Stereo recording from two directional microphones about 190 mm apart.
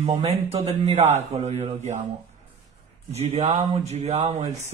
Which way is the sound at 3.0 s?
35° right (ahead or behind).